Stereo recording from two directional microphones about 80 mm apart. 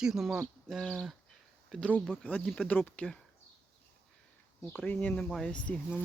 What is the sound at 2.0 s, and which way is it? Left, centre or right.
Speech, centre.